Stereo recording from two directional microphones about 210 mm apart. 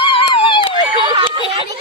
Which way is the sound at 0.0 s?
25° left (ahead or behind).